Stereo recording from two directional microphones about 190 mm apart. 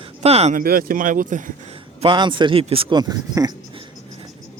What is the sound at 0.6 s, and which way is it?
Speech, 50° right (ahead or behind).